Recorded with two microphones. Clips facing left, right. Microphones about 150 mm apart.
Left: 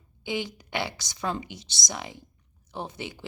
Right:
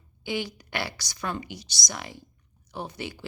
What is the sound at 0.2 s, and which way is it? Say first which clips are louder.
A woman's voice: even; 20° left (ahead or behind).